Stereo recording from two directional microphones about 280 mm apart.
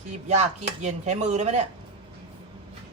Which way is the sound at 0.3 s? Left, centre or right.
Right.